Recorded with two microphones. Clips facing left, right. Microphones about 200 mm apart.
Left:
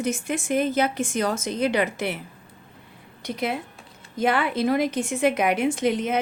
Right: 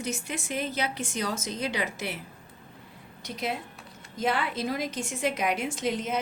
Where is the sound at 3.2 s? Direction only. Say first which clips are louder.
Left 5 dB; 60° left (ahead or behind).